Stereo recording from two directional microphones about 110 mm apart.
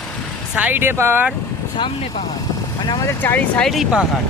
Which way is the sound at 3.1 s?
20° left (ahead or behind).